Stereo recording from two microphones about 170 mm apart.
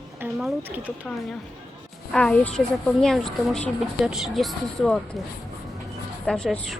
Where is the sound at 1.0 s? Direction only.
5° left (ahead or behind).